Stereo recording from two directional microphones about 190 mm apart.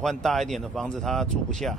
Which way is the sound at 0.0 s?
Centre (ahead or behind).